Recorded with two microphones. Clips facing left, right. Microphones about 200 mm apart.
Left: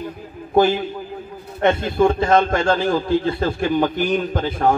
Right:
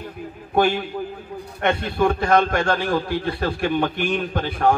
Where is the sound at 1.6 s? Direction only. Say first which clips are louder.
Left 4 dB; 25° left (ahead or behind).